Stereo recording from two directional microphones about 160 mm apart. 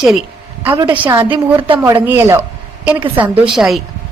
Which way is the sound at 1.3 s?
30° right (ahead or behind).